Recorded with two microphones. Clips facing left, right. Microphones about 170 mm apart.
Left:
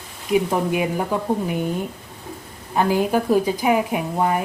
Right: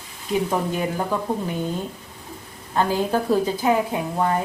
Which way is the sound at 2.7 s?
15° left (ahead or behind).